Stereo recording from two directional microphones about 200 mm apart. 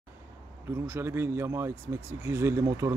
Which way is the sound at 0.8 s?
10° right (ahead or behind).